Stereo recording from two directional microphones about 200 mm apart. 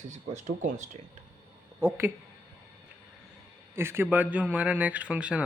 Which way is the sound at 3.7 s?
10° right (ahead or behind).